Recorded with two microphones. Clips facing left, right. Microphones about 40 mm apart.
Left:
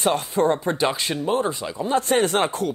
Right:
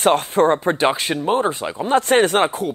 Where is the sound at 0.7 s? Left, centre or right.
Right.